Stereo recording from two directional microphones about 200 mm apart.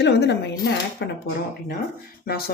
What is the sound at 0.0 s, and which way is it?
Speech, 60° left (ahead or behind).